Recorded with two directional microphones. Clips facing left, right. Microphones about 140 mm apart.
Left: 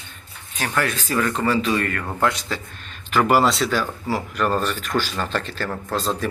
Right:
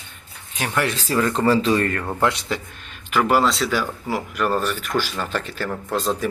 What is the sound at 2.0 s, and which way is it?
Speech, 15° right (ahead or behind).